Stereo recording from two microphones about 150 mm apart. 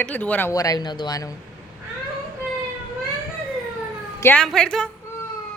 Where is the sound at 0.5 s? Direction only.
25° left (ahead or behind).